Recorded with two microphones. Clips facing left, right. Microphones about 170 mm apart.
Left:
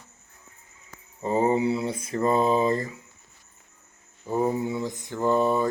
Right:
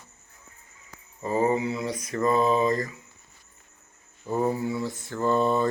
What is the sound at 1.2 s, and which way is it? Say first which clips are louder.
Speech: left 2 dB; 25° left (ahead or behind).